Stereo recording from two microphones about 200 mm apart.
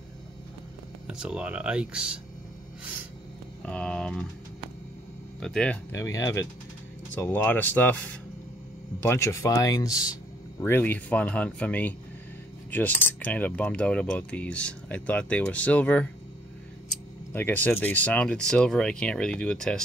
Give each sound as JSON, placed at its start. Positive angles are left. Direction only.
{"t": 1.0, "sound": "speech", "side_deg": -5}
{"t": 3.6, "sound": "speech", "side_deg": 5}
{"t": 5.4, "sound": "keys jangling", "side_deg": 5}
{"t": 17.3, "sound": "speech", "side_deg": 10}